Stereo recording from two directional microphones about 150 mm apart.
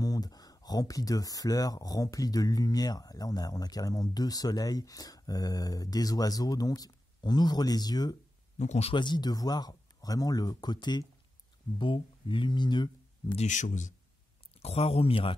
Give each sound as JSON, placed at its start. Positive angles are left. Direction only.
{"t": 0.0, "sound": "speech", "side_deg": 25}
{"t": 8.5, "sound": "speech", "side_deg": 50}
{"t": 8.9, "sound": "speech", "side_deg": 30}
{"t": 13.4, "sound": "speech", "side_deg": 55}
{"t": 14.6, "sound": "speech", "side_deg": 40}